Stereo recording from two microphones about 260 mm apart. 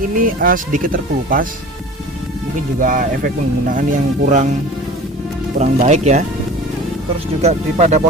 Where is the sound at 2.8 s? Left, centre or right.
Right.